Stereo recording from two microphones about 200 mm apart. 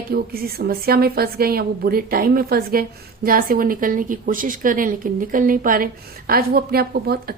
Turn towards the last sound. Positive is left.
turn(degrees=-50)  # may be behind; listen again after turning